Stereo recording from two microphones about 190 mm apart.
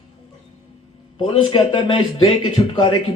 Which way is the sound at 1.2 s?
30° left (ahead or behind).